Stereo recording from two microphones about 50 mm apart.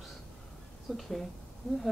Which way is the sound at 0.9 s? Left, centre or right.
Centre.